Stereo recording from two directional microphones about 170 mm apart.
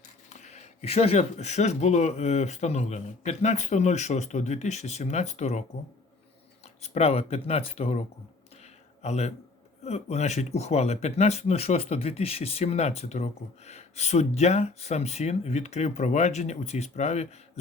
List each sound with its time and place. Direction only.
0.3 s speech: 45° left (ahead or behind)
6.8 s a man's voice: 40° left (ahead or behind)